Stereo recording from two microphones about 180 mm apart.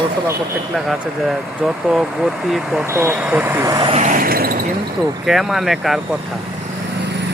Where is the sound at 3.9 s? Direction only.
45° right (ahead or behind).